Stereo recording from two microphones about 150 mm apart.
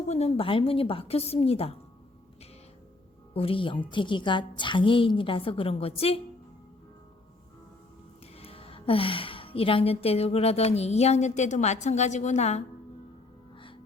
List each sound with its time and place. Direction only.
0.1 s a woman's voice: 45° left (ahead or behind)
3.3 s a woman's voice: 35° left (ahead or behind)
8.4 s a woman's voice: 40° left (ahead or behind)